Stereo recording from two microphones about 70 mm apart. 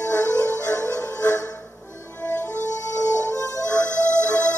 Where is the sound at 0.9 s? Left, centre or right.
Left.